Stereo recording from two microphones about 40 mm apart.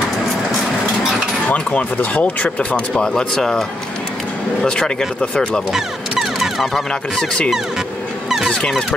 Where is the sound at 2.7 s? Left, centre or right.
Left.